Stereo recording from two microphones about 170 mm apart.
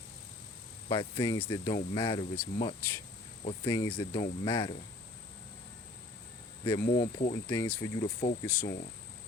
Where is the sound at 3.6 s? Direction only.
20° left (ahead or behind).